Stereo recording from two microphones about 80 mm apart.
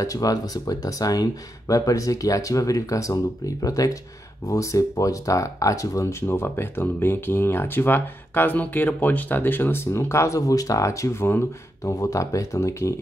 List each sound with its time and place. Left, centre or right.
0.0 s speech: left
11.8 s speech: left